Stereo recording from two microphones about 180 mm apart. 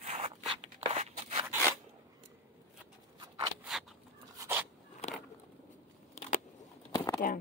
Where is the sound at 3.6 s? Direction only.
Centre (ahead or behind).